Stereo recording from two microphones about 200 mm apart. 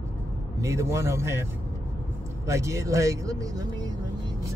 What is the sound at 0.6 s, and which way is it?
Speech, 15° right (ahead or behind).